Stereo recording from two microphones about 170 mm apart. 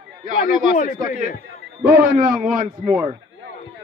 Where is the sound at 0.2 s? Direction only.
50° right (ahead or behind).